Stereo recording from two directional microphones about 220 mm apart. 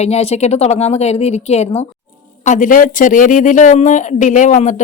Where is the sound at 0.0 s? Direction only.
30° left (ahead or behind).